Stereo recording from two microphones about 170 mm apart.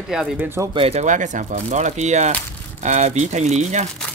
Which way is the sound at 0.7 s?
35° right (ahead or behind).